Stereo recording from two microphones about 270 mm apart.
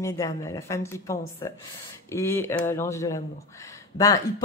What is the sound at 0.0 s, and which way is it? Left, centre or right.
Speech, centre.